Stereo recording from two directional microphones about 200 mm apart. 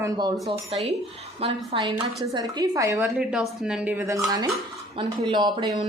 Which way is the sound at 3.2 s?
Centre (ahead or behind).